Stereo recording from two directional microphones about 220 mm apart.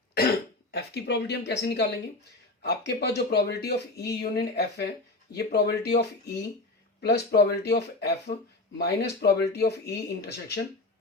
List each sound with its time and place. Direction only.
0.1 s speech: 45° left (ahead or behind)